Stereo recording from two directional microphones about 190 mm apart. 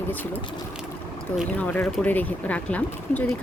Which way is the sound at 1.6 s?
10° left (ahead or behind).